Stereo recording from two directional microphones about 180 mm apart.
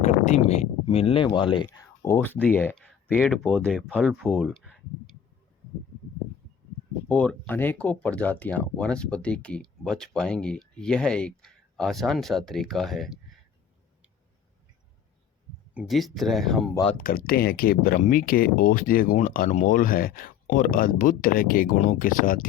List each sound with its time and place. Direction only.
0.0 s speech: 40° left (ahead or behind); by 4.7 s centre (ahead or behind)
7.1 s speech: 5° left (ahead or behind)
15.7 s speech: 5° right (ahead or behind)
17.0 s speech: 55° left (ahead or behind)